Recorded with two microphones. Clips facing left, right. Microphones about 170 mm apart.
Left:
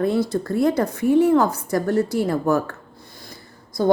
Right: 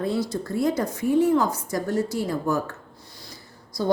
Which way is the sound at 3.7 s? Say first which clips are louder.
Left 6 dB; 50° left (ahead or behind).